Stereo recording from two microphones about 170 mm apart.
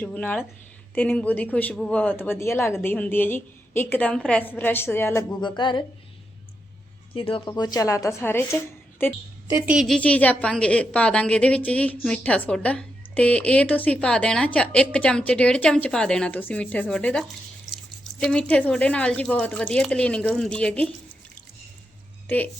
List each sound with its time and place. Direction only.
0.0 s a woman's voice: 10° left (ahead or behind)
5.4 s a woman's voice: 25° left (ahead or behind)
7.1 s a woman's voice: 30° left (ahead or behind); by 9.1 s 15° left (ahead or behind)
9.5 s a woman's voice: 15° right (ahead or behind)
9.7 s a woman's voice: centre (ahead or behind)